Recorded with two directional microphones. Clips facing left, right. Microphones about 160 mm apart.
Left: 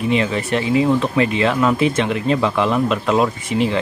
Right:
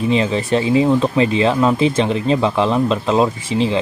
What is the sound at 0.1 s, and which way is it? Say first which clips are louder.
Speech: right 2 dB; 30° right (ahead or behind).